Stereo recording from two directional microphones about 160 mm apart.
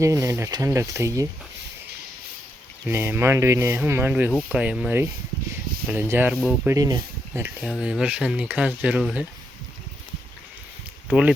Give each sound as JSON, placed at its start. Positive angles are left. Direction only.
{"t": 0.0, "sound": "speech", "side_deg": -20}
{"t": 2.8, "sound": "speech", "side_deg": -15}
{"t": 7.4, "sound": "speech", "side_deg": -5}
{"t": 11.1, "sound": "speech", "side_deg": -5}